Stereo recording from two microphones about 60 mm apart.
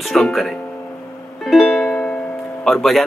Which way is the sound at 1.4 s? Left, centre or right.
Centre.